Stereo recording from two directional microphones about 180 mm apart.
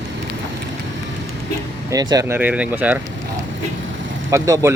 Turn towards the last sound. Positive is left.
turn(degrees=-15)  # may be behind; listen again after turning